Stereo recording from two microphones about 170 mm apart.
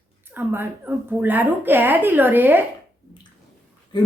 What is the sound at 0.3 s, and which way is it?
A woman's voice, 10° right (ahead or behind).